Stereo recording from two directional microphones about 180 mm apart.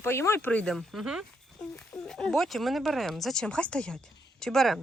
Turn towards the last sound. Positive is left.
turn(degrees=0)  # may be behind; listen again after turning